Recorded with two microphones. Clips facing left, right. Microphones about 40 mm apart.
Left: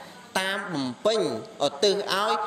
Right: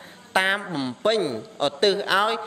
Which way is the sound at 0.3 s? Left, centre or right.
Right.